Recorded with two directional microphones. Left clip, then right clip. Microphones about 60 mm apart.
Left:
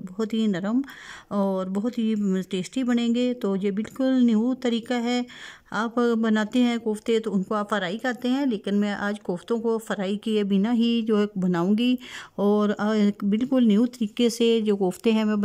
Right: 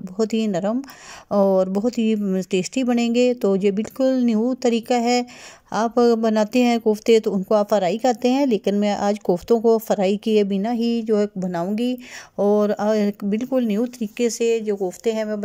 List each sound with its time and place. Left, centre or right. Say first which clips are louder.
0.2 s a woman's voice: right 6 dB; centre
4.1 s speech: right 2 dB; right
4.4 s a woman's voice: right 5 dB; centre
14.2 s speech: right 2 dB; left
15.1 s speech: right 2 dB; left